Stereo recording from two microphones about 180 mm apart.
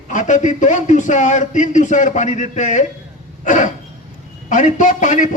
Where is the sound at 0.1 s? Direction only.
45° left (ahead or behind).